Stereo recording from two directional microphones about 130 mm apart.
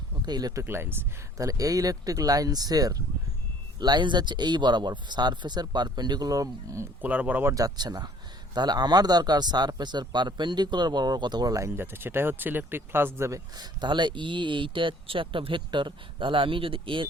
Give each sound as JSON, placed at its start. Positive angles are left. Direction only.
{"t": 0.3, "sound": "speech", "side_deg": -30}
{"t": 0.6, "sound": "speech", "side_deg": -20}
{"t": 7.0, "sound": "speech", "side_deg": -10}
{"t": 7.5, "sound": "speech", "side_deg": -30}
{"t": 13.8, "sound": "speech", "side_deg": -35}